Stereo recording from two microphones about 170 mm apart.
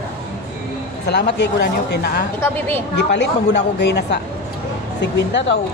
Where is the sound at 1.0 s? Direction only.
85° left.